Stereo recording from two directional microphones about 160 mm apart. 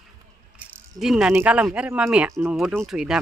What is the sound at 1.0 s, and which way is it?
Speech, centre (ahead or behind).